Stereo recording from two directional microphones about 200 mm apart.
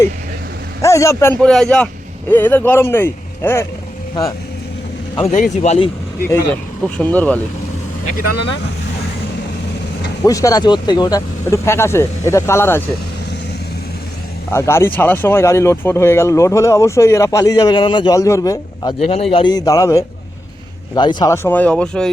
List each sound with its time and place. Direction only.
0.8 s speech: 15° left (ahead or behind)
5.1 s a man's voice: 30° left (ahead or behind)
6.2 s speech: 10° left (ahead or behind)
8.0 s speech: 50° left (ahead or behind)
10.2 s speech: 15° left (ahead or behind)
14.5 s speech: 15° left (ahead or behind)
19.0 s a man's voice: 30° left (ahead or behind)
21.2 s speech: 15° left (ahead or behind)